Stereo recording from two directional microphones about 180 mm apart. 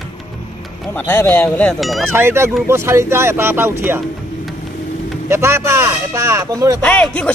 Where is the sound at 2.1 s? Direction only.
15° right (ahead or behind).